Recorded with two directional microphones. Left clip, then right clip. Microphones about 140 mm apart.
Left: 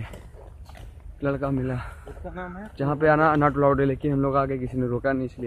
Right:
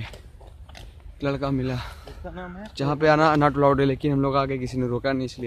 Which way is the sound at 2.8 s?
25° right (ahead or behind).